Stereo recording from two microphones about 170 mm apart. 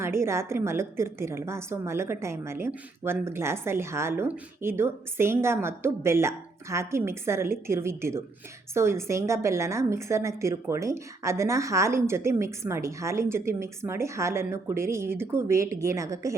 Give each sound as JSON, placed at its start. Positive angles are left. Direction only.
{"t": 0.0, "sound": "a woman's voice", "side_deg": -15}